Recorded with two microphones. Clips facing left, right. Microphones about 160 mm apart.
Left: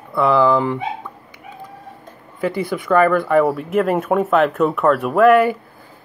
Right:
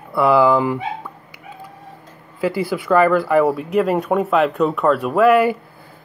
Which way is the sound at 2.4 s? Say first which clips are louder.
Right 1 dB; 5° right (ahead or behind).